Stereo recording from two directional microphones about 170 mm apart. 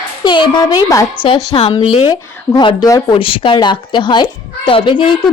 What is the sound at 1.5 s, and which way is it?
Speech, 35° left (ahead or behind).